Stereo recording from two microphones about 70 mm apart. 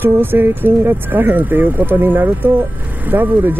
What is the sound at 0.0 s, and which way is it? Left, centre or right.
Speech, right.